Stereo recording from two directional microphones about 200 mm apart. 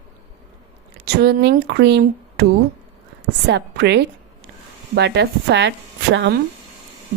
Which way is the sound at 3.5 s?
60° right (ahead or behind).